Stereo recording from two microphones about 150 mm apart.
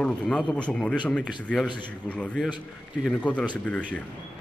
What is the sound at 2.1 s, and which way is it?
Speech, 10° left (ahead or behind).